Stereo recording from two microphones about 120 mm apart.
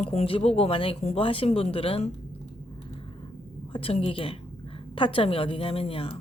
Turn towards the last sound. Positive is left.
turn(degrees=50)  # may be behind; listen again after turning